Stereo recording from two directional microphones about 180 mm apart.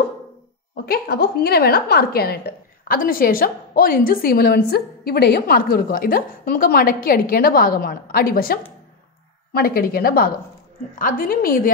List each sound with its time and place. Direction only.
0.8 s a woman's voice: 60° left (ahead or behind)